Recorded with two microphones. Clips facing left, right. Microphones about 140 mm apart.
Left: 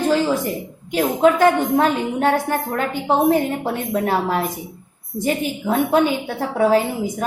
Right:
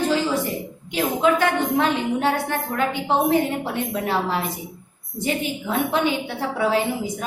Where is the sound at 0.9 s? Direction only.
45° left (ahead or behind).